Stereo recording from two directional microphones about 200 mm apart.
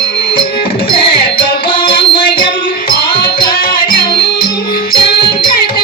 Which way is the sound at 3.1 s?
25° left (ahead or behind).